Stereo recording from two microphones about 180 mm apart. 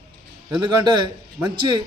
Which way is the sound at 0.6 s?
25° right (ahead or behind).